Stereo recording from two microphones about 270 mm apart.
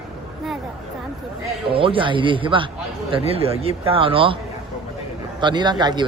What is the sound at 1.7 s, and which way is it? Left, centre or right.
Speech, centre.